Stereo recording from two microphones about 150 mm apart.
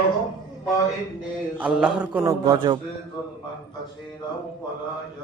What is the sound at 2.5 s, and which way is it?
Mantra, 30° right (ahead or behind).